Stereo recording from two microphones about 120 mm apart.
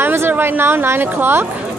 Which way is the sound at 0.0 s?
20° right (ahead or behind).